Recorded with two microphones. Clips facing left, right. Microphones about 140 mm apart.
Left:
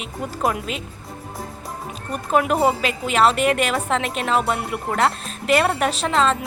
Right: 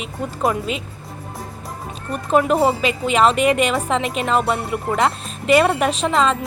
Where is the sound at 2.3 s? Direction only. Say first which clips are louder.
Right 2 dB; 5° left (ahead or behind).